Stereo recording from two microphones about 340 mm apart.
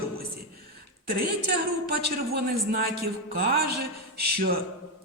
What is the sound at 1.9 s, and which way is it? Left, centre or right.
A man's voice, right.